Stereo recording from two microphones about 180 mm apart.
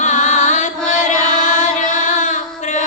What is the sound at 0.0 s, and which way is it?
Carnatic music, 40° left (ahead or behind).